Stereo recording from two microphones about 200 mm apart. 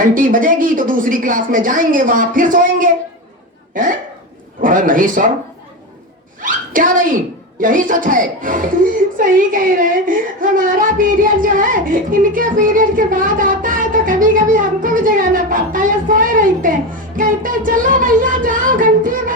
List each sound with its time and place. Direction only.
0.0 s speech: 40° right (ahead or behind)
6.4 s speech: 40° right (ahead or behind)